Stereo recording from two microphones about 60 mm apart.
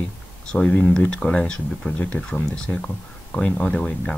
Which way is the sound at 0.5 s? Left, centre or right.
Centre.